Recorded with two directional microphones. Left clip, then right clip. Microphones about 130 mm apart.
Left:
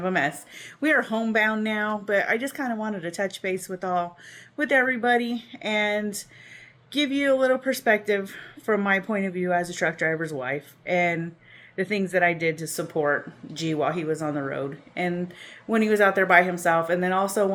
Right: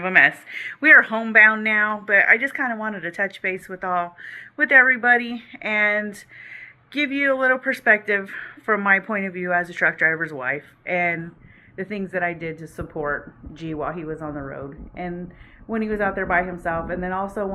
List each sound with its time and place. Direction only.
0.0 s speech: 35° left (ahead or behind)
14.3 s a woman's voice: 45° left (ahead or behind)